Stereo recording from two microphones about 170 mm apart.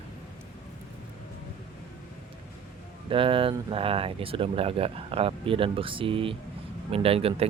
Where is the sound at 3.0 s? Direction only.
30° right (ahead or behind).